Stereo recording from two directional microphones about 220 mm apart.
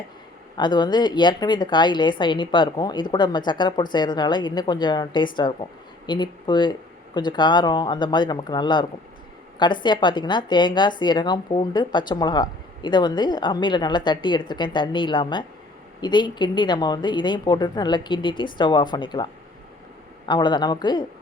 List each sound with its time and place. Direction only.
0.5 s a woman's voice: 20° left (ahead or behind)